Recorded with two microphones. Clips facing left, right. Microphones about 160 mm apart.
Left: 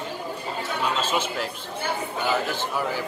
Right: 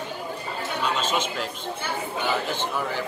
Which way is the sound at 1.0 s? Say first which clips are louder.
Left 1 dB; 10° left (ahead or behind).